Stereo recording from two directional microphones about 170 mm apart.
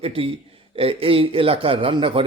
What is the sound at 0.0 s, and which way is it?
A man's voice, 35° right (ahead or behind).